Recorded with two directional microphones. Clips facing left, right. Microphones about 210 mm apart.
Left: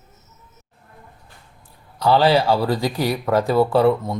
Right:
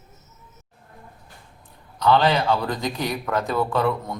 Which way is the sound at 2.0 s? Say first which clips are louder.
Left 3 dB; 30° left (ahead or behind).